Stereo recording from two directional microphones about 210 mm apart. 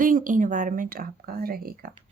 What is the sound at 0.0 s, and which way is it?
Speech, 40° right (ahead or behind).